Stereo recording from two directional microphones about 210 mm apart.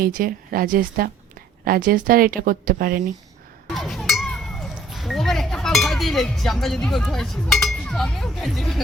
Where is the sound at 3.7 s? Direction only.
Centre (ahead or behind).